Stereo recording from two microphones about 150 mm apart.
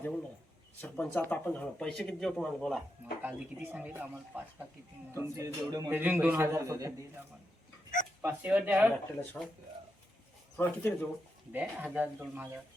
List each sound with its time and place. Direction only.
0.0 s speech: 10° left (ahead or behind)
3.2 s speech: 10° right (ahead or behind)
5.3 s a man's voice: 25° right (ahead or behind)
5.9 s speech: 10° right (ahead or behind)
8.2 s speech: 10° right (ahead or behind)
9.4 s speech: 10° left (ahead or behind)
10.6 s speech: 15° left (ahead or behind)
11.5 s speech: 10° right (ahead or behind)